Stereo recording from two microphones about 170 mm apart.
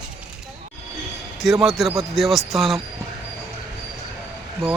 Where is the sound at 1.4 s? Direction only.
Centre (ahead or behind).